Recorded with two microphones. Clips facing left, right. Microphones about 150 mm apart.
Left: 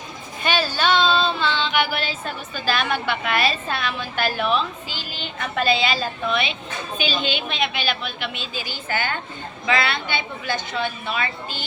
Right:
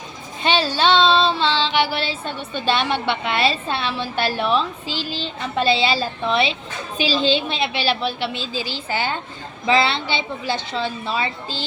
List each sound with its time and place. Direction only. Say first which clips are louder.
0.4 s child singing: right 3 dB; 25° right (ahead or behind)